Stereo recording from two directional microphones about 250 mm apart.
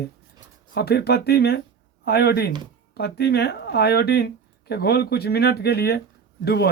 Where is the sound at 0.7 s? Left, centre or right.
Left.